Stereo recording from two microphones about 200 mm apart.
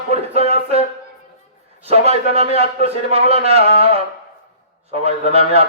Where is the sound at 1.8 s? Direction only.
30° right (ahead or behind).